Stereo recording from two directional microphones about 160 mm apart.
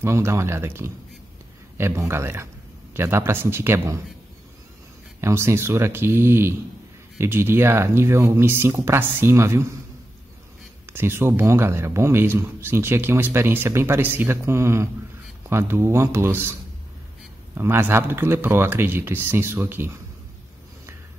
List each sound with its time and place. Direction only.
0.0 s a man's voice: 15° right (ahead or behind)
5.2 s a man's voice: 15° right (ahead or behind)
10.9 s a man's voice: 15° right (ahead or behind)
17.6 s a man's voice: 15° right (ahead or behind)